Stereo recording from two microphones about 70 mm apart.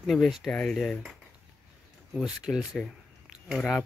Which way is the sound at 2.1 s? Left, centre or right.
Centre.